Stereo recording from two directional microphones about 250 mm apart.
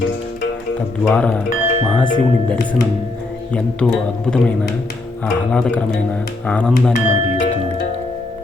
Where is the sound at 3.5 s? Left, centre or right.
Centre.